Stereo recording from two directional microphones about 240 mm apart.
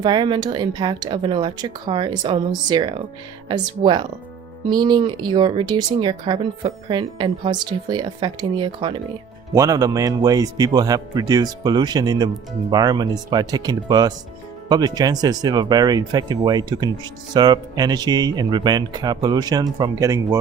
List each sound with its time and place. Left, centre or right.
0.0 s speech: centre